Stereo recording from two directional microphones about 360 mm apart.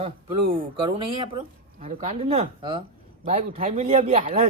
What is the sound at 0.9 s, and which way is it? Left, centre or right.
Speech, centre.